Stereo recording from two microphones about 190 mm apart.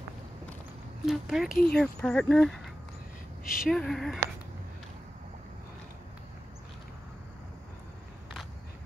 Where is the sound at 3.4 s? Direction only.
50° left (ahead or behind).